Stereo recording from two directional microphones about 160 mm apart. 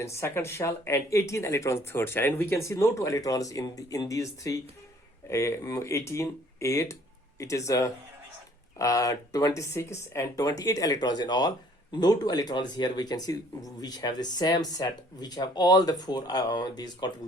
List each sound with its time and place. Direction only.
0.0 s speech: 15° left (ahead or behind)